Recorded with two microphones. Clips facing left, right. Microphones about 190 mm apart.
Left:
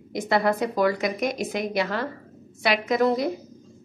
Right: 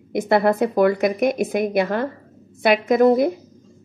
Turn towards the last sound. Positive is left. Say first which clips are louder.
# right 7 dB
turn(degrees=-50)  # may be behind; listen again after turning